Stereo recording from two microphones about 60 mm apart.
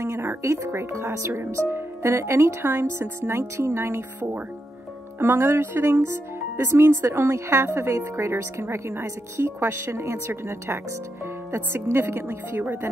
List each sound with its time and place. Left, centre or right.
0.0 s music: right
0.4 s speech: right